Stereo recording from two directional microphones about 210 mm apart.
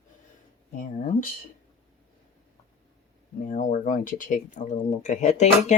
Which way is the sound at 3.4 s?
40° left (ahead or behind).